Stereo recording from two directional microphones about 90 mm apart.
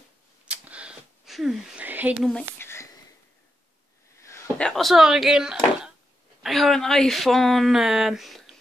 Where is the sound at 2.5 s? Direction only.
25° left (ahead or behind).